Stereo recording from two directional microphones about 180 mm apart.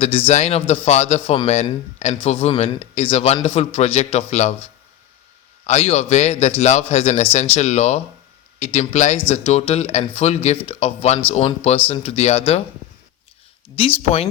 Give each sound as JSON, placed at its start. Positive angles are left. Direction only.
{"t": 0.0, "sound": "a man's voice", "side_deg": 35}
{"t": 13.7, "sound": "a man's voice", "side_deg": 30}